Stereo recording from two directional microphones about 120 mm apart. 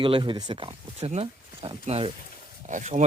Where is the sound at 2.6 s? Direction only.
90° right.